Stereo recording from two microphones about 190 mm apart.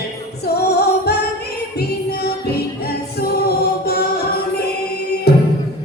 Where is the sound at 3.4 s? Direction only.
55° left (ahead or behind).